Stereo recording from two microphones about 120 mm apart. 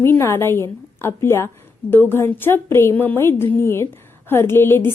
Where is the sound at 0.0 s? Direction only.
20° left (ahead or behind).